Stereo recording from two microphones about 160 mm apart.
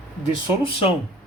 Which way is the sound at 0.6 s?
35° left (ahead or behind).